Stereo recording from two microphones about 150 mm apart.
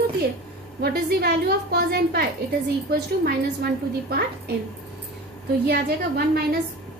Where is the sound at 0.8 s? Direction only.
90° right.